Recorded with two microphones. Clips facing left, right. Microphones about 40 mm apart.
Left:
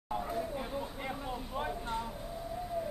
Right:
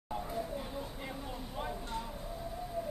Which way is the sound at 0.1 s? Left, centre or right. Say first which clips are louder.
Left 2 dB; left.